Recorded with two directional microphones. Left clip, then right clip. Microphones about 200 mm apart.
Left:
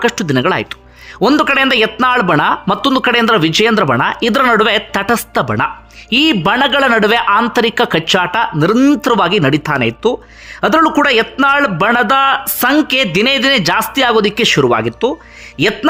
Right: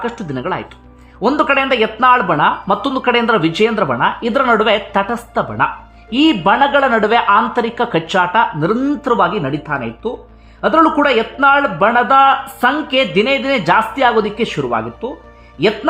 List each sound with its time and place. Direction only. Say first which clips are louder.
0.0 s a man's voice: left 8 dB; 25° left (ahead or behind)